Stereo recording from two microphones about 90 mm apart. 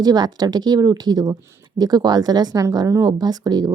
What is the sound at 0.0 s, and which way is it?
A woman's voice, 50° right (ahead or behind).